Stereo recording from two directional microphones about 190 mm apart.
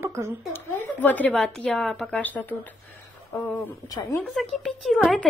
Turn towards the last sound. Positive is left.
turn(degrees=0)  # may be behind; listen again after turning